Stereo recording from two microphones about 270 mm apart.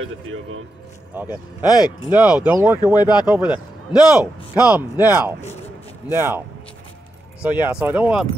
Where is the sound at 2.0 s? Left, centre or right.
Centre.